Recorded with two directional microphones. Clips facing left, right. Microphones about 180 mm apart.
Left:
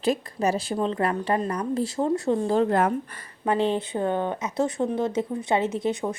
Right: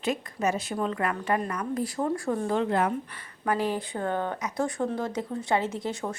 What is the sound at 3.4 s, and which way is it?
Speech, 25° left (ahead or behind).